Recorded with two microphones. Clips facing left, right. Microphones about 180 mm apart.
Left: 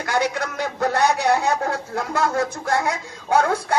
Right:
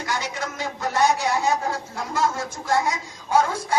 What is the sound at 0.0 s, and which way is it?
A man's voice, 55° left (ahead or behind).